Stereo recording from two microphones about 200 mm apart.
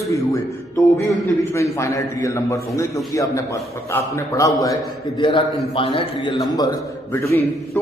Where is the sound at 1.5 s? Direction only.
15° left (ahead or behind).